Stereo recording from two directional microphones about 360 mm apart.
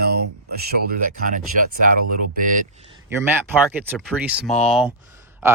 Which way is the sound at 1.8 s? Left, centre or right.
Right.